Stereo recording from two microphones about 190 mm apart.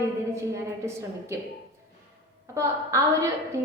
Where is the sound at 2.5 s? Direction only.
15° right (ahead or behind).